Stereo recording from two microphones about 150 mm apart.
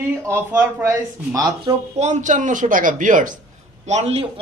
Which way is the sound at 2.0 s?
50° right (ahead or behind).